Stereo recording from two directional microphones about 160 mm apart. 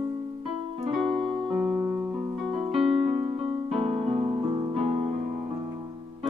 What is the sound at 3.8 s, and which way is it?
Music, 35° right (ahead or behind).